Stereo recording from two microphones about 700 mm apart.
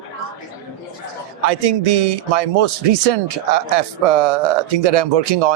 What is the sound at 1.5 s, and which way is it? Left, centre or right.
Speech, right.